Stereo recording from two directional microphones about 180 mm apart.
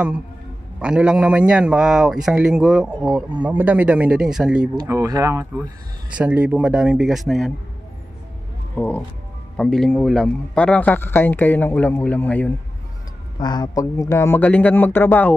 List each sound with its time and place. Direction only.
0.7 s a man's voice: 5° right (ahead or behind)
4.8 s a man's voice: 15° right (ahead or behind); by 7.5 s centre (ahead or behind)
8.7 s a man's voice: 10° left (ahead or behind)
13.4 s a man's voice: 25° left (ahead or behind)